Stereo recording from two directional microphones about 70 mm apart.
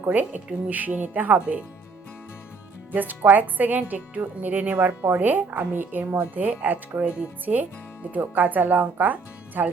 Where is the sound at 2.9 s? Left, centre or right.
Right.